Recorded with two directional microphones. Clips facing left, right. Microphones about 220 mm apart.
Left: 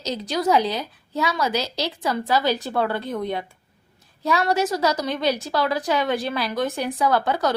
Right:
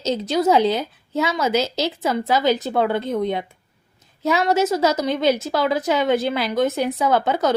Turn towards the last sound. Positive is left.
turn(degrees=-20)  # may be behind; listen again after turning